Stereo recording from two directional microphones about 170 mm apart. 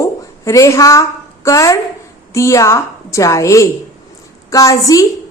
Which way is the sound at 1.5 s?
20° left (ahead or behind).